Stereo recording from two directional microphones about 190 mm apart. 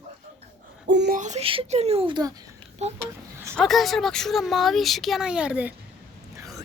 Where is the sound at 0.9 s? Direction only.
65° right (ahead or behind).